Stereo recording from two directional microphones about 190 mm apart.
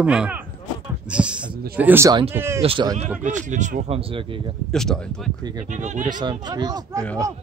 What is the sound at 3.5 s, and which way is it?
Speech, 40° right (ahead or behind).